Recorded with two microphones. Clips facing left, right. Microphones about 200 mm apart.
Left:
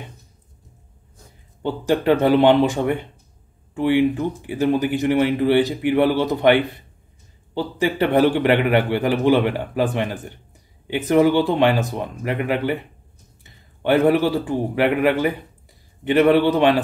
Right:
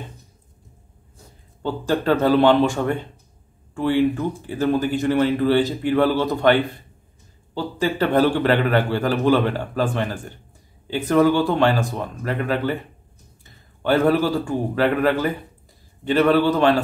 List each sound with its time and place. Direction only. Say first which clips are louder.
1.6 s a man's voice: left 2 dB; 20° left (ahead or behind)